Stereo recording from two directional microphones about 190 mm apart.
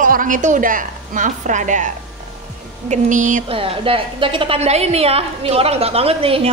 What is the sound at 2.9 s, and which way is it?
Speech, 40° right (ahead or behind).